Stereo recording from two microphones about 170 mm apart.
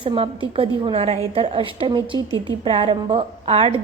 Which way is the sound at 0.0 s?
30° right (ahead or behind).